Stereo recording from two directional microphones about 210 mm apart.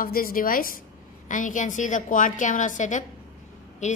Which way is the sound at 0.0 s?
45° left (ahead or behind).